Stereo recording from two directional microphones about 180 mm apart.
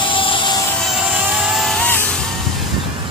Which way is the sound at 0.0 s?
30° left (ahead or behind).